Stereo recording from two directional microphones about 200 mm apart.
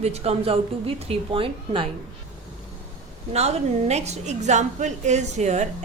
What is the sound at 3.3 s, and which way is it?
A woman's voice, 35° right (ahead or behind).